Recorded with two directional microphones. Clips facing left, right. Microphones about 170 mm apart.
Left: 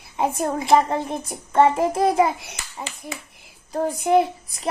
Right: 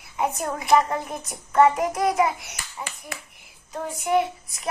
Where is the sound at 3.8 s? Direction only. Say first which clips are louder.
Left 4 dB; 35° left (ahead or behind).